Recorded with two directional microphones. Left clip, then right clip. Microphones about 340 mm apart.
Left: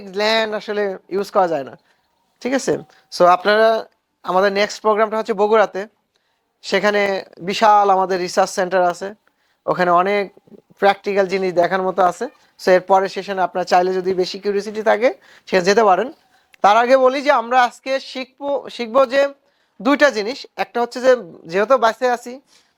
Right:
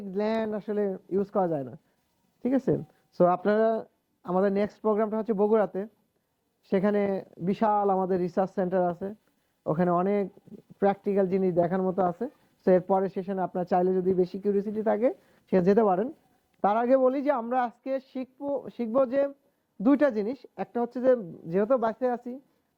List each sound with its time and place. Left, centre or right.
0.0 s speech: centre
21.2 s speech: centre
21.4 s speech: centre